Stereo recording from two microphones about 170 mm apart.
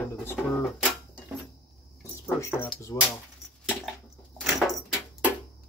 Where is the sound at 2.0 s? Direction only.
15° left (ahead or behind).